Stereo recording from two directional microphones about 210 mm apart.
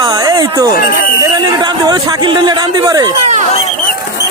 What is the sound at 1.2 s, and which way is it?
Speech, 20° right (ahead or behind).